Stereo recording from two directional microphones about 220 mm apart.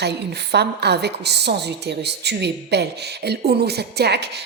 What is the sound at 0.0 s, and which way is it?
A woman's voice, 50° right (ahead or behind).